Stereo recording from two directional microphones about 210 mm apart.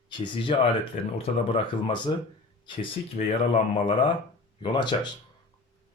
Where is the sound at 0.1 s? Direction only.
25° left (ahead or behind).